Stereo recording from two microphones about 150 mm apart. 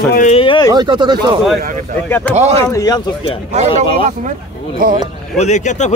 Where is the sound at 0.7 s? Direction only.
30° right (ahead or behind).